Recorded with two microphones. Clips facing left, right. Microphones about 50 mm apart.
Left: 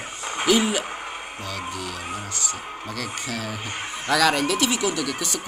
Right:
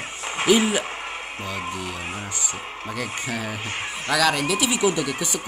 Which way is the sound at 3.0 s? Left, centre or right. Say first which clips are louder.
Right 2 dB; centre.